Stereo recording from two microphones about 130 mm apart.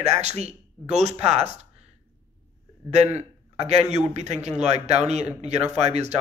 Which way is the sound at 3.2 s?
60° right (ahead or behind).